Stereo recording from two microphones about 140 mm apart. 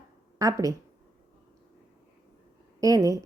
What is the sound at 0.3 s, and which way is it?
Speech, 25° right (ahead or behind).